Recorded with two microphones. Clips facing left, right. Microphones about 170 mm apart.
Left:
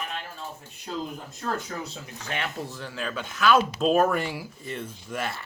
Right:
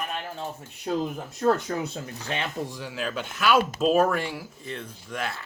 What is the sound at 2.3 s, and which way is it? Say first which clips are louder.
Speech: right 1 dB; 20° right (ahead or behind).